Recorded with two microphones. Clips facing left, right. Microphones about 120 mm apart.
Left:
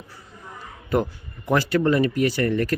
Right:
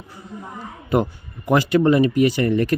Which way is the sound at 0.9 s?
20° right (ahead or behind).